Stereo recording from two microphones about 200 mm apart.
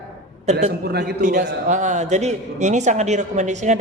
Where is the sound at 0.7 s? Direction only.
50° right (ahead or behind).